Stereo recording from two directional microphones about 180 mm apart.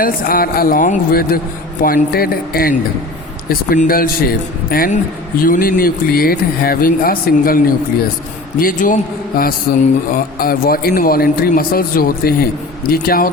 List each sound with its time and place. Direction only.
0.0 s a man's voice: 55° left (ahead or behind)